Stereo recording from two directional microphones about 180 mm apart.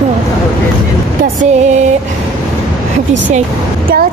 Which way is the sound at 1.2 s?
40° right (ahead or behind).